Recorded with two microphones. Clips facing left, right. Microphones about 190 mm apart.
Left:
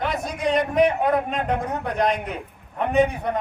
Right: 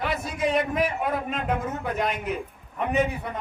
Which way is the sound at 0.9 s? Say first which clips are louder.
Left 6 dB; 70° left (ahead or behind).